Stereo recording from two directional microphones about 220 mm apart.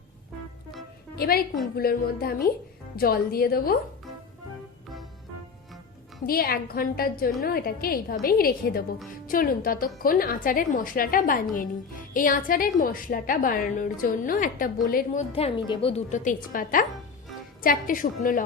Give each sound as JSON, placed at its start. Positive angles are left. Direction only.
{"t": 1.1, "sound": "a woman's voice", "side_deg": 45}
{"t": 6.2, "sound": "a woman's voice", "side_deg": 40}
{"t": 15.3, "sound": "a woman's voice", "side_deg": 25}